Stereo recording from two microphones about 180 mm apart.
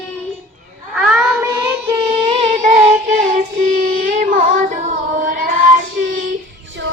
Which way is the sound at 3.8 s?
50° right (ahead or behind).